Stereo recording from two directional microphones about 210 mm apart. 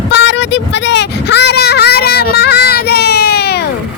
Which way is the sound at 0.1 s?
55° left (ahead or behind).